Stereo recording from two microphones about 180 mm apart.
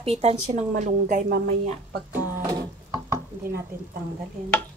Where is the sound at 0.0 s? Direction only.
35° right (ahead or behind).